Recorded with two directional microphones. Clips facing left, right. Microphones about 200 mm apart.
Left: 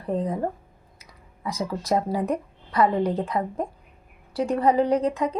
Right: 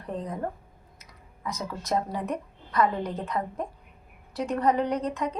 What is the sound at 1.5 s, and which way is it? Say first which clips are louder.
Speech: left 5 dB; 30° left (ahead or behind).